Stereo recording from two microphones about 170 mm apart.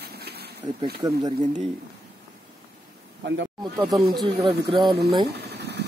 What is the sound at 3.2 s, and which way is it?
Speech, 90° right.